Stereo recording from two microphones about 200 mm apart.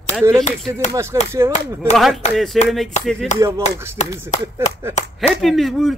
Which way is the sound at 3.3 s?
15° right (ahead or behind).